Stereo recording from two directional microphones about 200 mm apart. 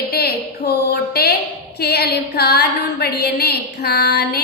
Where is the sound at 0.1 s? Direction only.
50° left (ahead or behind).